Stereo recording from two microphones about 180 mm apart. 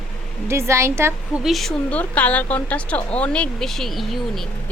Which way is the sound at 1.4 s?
Centre (ahead or behind).